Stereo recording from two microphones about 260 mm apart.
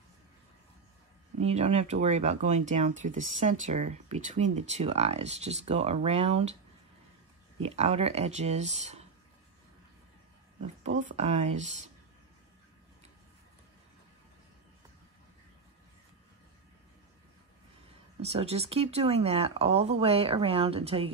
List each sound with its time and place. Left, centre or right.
1.4 s speech: right
7.6 s speech: right
11.0 s speech: right
18.2 s speech: right